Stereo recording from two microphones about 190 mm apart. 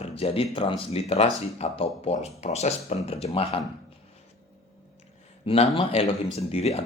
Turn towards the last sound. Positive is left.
turn(degrees=35)  # may be behind; listen again after turning